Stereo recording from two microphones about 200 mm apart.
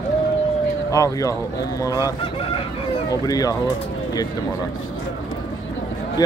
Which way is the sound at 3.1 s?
20° left (ahead or behind).